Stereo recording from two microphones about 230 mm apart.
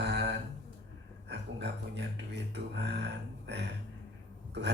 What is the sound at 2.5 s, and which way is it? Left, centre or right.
A man's voice, right.